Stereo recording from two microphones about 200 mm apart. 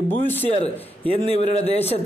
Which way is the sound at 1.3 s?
30° left (ahead or behind).